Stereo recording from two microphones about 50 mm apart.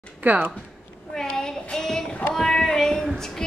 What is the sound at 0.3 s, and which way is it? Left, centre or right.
Speech, right.